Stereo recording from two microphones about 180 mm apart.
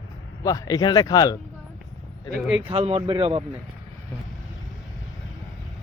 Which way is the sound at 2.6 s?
35° right (ahead or behind).